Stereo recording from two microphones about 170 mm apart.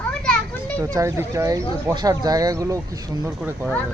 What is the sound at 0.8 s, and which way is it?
Speech, 15° right (ahead or behind).